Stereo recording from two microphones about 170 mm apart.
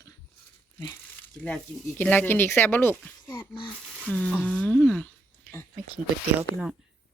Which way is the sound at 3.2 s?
25° left (ahead or behind).